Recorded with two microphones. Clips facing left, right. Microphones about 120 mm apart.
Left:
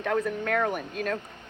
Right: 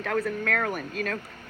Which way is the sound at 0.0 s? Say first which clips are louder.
Left 1 dB; 20° left (ahead or behind).